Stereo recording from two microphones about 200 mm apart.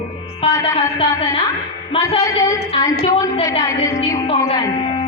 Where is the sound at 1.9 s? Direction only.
30° left (ahead or behind).